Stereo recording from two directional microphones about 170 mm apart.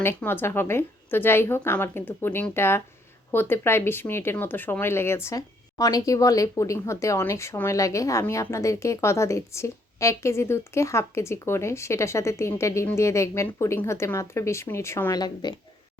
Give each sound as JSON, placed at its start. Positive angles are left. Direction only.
{"t": 0.0, "sound": "speech", "side_deg": 10}